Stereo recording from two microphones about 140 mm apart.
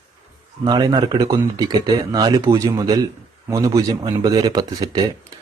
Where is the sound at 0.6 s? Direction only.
30° right (ahead or behind).